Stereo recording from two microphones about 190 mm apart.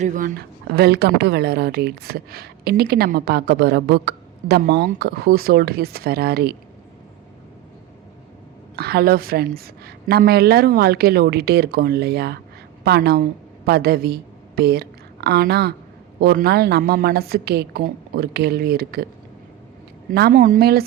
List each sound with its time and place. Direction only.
0.0 s speech: 40° right (ahead or behind)
0.3 s a woman's voice: 60° right (ahead or behind)
8.7 s a woman's voice: 55° right (ahead or behind)
20.1 s a woman's voice: 55° right (ahead or behind)